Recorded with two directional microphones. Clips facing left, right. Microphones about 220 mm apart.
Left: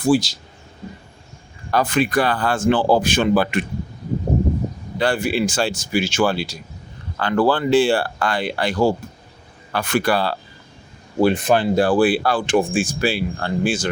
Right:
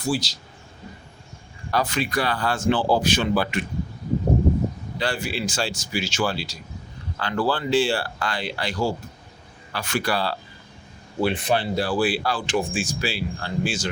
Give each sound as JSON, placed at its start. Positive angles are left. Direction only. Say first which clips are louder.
{"t": 0.0, "sound": "speech", "louder": "left 9 dB", "side_deg": 50}
{"t": 1.7, "sound": "speech", "louder": "left 6 dB", "side_deg": 50}
{"t": 4.9, "sound": "speech", "louder": "left 8 dB", "side_deg": 55}